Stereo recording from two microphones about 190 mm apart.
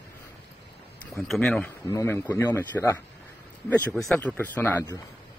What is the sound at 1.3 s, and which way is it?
A man's voice, 5° left (ahead or behind).